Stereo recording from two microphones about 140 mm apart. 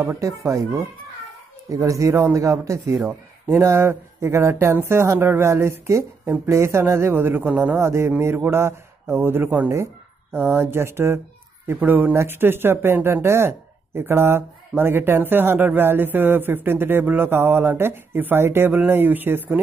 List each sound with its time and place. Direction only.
0.0 s speech: 20° right (ahead or behind)